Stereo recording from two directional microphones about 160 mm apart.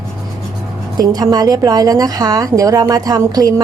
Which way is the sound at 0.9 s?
25° right (ahead or behind).